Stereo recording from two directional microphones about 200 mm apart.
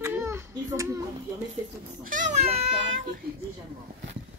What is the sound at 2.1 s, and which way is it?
Speech, 40° right (ahead or behind).